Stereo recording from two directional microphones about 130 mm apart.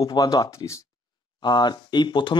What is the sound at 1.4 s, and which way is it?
Speech, 35° left (ahead or behind).